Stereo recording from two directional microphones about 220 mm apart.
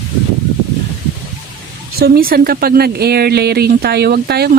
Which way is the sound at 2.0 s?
45° right (ahead or behind).